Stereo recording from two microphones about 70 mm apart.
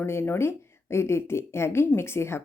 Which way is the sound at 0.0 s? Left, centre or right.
Left.